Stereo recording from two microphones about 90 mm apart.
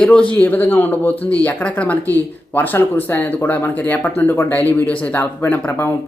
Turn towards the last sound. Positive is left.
turn(degrees=20)  # may be behind; listen again after turning